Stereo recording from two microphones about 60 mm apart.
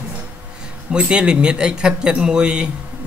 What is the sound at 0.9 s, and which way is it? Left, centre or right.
Speech, centre.